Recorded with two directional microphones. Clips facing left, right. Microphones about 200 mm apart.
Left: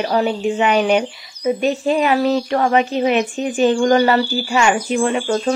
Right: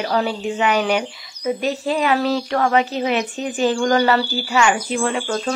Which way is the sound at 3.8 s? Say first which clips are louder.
Left 2 dB; 25° left (ahead or behind).